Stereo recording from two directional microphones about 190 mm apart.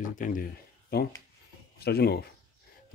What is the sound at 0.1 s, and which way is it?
Speech, 45° left (ahead or behind).